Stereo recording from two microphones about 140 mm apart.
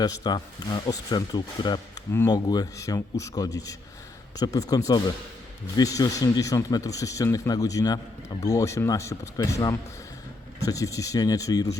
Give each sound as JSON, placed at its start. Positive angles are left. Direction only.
{"t": 0.0, "sound": "speech", "side_deg": 30}